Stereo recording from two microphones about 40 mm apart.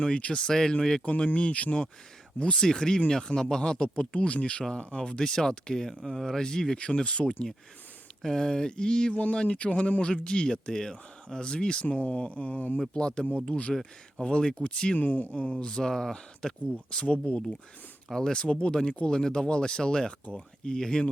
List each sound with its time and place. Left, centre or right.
0.2 s speech: left
0.4 s speech: centre
1.0 s speech: left
2.4 s speech: centre
5.0 s speech: centre
6.7 s speech: left
8.2 s speech: centre
9.1 s speech: left
14.9 s speech: left
18.1 s speech: centre